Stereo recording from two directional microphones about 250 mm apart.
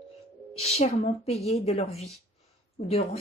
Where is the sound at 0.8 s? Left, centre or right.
Left.